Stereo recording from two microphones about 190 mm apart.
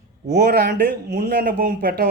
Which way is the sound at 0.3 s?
60° right (ahead or behind).